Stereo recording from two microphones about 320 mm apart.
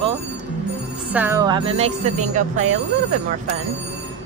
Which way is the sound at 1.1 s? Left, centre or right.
Centre.